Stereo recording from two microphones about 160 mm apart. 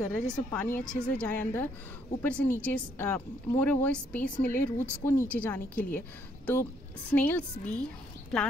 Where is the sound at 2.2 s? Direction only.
10° left (ahead or behind).